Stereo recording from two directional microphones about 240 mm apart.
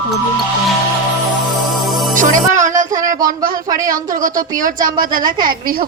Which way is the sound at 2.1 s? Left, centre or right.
Right.